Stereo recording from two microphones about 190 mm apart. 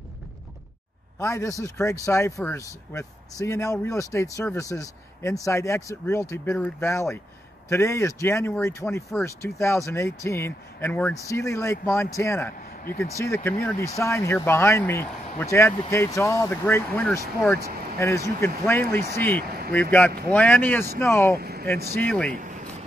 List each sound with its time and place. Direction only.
1.2 s speech: 15° left (ahead or behind)
21.4 s vehicle: 55° right (ahead or behind)
21.9 s speech: 5° left (ahead or behind)